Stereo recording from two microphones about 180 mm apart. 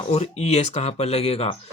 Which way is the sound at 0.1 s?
35° left (ahead or behind).